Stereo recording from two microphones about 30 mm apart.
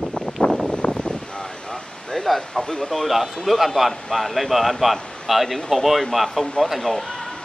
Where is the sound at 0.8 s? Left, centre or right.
Left.